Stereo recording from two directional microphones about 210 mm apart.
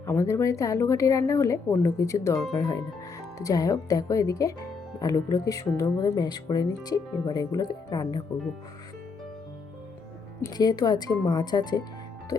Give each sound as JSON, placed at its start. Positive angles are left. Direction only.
{"t": 0.0, "sound": "speech", "side_deg": 15}
{"t": 10.4, "sound": "speech", "side_deg": 20}